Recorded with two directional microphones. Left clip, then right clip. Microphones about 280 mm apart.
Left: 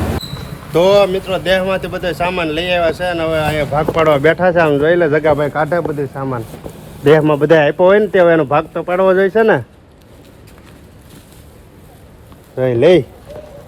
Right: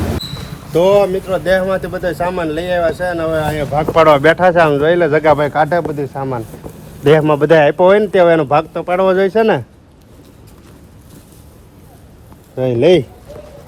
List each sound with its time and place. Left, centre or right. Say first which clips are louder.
0.7 s speech: even; left
0.9 s speech: even; centre
3.5 s speech: left 2 dB; left
3.9 s speech: right 4 dB; right; by 5.3 s centre
5.3 s speech: right 2 dB; right
6.7 s speech: left 1 dB; centre
12.5 s a man's voice: left 1 dB; centre